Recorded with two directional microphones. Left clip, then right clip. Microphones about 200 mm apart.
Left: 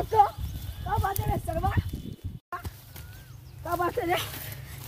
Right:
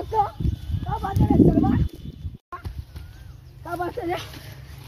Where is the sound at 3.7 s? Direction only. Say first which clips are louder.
Left 1 dB; 10° left (ahead or behind).